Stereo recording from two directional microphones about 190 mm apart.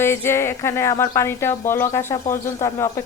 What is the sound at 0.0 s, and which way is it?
Speech, 15° left (ahead or behind).